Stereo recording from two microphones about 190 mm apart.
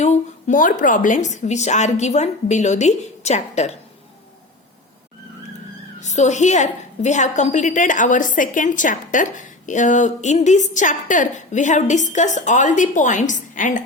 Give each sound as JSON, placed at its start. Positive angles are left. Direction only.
{"t": 0.0, "sound": "a woman's voice", "side_deg": 40}
{"t": 6.0, "sound": "a woman's voice", "side_deg": 35}